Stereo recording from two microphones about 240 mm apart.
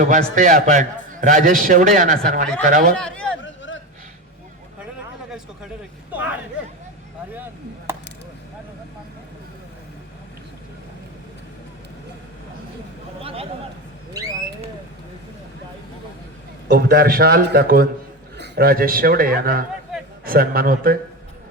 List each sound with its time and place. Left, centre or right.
0.0 s a man's voice: right
2.9 s speech: centre
3.4 s a sound: left
6.1 s speech: centre
7.3 s chop: centre
13.2 s speech: right
16.6 s a man's voice: right